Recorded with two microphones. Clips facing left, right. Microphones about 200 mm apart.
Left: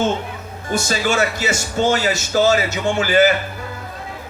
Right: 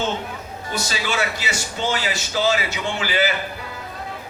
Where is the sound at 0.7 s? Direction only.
50° left (ahead or behind).